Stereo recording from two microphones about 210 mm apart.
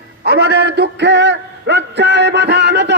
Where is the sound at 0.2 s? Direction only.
50° right (ahead or behind).